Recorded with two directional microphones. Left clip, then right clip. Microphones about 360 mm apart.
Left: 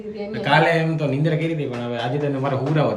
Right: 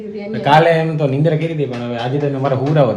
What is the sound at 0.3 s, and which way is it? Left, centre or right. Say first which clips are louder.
A man's voice: right 6 dB; centre.